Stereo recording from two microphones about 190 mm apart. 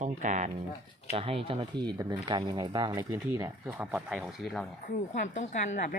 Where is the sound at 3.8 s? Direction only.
5° right (ahead or behind).